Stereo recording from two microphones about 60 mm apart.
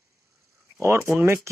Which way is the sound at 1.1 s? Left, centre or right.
Right.